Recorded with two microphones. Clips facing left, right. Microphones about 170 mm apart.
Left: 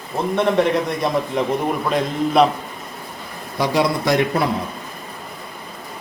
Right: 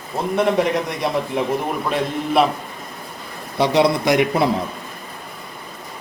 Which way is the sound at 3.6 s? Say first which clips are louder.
Right 3 dB; 25° right (ahead or behind).